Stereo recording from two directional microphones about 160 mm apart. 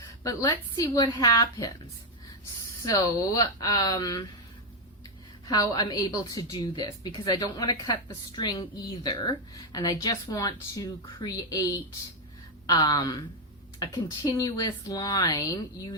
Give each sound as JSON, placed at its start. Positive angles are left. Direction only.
{"t": 0.2, "sound": "a woman's voice", "side_deg": 20}
{"t": 2.8, "sound": "a woman's voice", "side_deg": 20}
{"t": 5.5, "sound": "a woman's voice", "side_deg": 25}
{"t": 14.3, "sound": "a woman's voice", "side_deg": 20}